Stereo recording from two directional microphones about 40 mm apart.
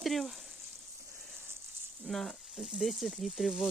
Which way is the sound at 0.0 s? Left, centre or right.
Centre.